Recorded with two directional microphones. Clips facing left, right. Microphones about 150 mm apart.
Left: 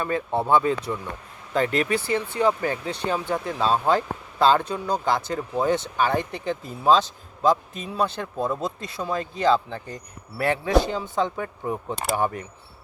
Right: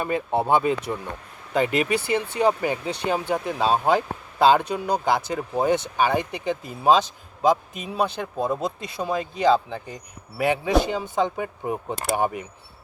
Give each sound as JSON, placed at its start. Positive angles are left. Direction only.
{"t": 0.0, "sound": "speech", "side_deg": -15}